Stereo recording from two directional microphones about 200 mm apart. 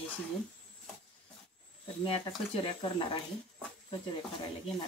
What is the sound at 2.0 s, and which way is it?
Speech, 30° left (ahead or behind).